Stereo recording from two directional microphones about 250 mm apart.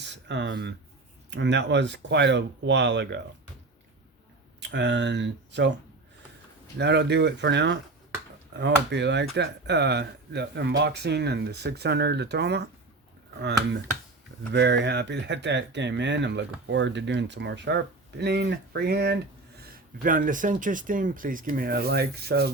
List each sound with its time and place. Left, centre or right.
0.0 s speech: right
4.6 s speech: right
6.7 s speech: right